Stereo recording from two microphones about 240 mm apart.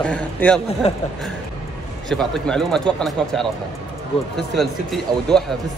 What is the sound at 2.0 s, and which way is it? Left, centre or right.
A man's voice, centre.